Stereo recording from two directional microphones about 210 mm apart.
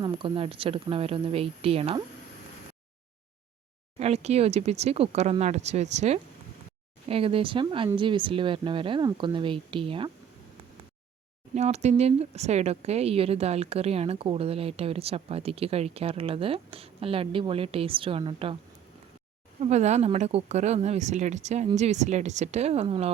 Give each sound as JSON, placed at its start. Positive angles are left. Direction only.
{"t": 0.0, "sound": "speech", "side_deg": -25}
{"t": 3.9, "sound": "speech", "side_deg": -30}
{"t": 11.5, "sound": "speech", "side_deg": -30}
{"t": 19.5, "sound": "speech", "side_deg": -30}